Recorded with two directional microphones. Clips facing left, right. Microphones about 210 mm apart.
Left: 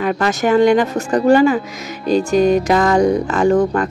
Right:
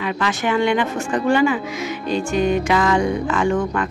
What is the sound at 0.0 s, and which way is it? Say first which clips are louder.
Speech: left 5 dB; 45° left (ahead or behind).